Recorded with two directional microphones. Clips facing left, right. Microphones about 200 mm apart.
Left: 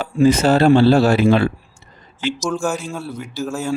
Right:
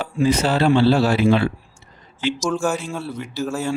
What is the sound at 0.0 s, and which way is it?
Speech, 45° left (ahead or behind).